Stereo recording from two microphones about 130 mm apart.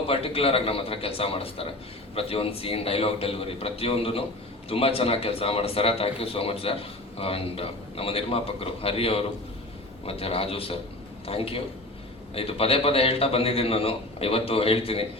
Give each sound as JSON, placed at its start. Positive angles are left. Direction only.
{"t": 0.1, "sound": "a man's voice", "side_deg": 50}